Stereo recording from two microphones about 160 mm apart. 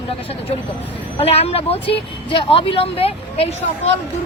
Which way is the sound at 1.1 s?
40° left (ahead or behind).